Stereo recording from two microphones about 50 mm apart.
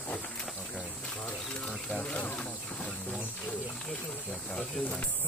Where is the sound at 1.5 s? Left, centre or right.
Centre.